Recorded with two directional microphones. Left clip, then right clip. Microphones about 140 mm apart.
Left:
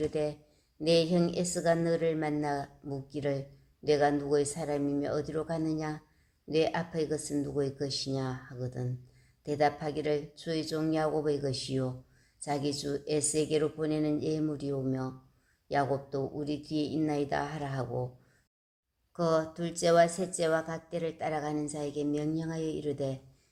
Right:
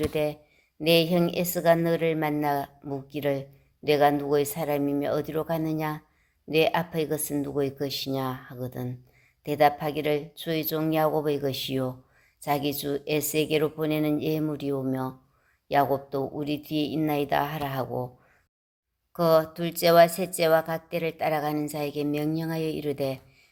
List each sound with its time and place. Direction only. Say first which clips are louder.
0.0 s a woman's voice: right 5 dB; 20° right (ahead or behind)
19.1 s a woman's voice: right 7 dB; 20° right (ahead or behind)